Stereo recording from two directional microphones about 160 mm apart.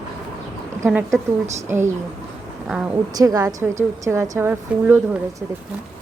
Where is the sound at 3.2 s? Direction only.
20° right (ahead or behind).